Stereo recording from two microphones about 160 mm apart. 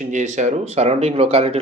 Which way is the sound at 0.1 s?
50° right (ahead or behind).